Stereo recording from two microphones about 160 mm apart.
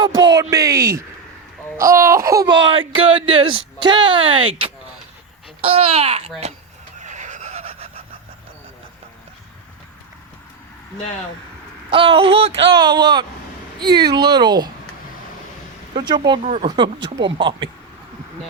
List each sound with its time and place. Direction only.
0.5 s speech: 20° right (ahead or behind)
2.6 s speech: 30° right (ahead or behind)
7.0 s a sound: 50° right (ahead or behind)
11.9 s speech: 35° right (ahead or behind)
16.0 s speech: 25° right (ahead or behind)